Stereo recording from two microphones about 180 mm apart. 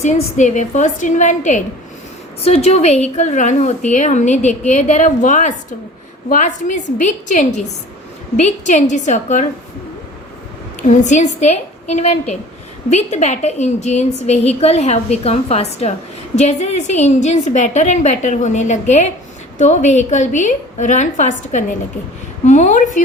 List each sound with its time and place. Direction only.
0.0 s a woman's voice: 40° left (ahead or behind)
10.8 s a woman's voice: 40° left (ahead or behind)